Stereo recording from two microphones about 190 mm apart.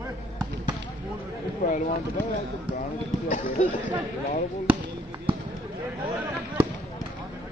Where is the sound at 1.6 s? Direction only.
40° left (ahead or behind).